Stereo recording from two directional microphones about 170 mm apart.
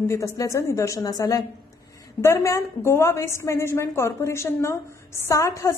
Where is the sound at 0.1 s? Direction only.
20° left (ahead or behind).